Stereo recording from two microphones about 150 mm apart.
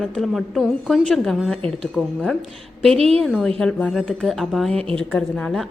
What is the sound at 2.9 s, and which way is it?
Speech, 40° right (ahead or behind).